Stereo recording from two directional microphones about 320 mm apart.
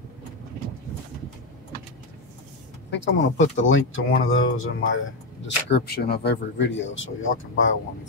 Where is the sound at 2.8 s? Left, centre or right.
Left.